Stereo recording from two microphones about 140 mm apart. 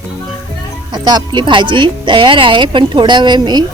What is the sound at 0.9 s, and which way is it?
Speech, 30° right (ahead or behind).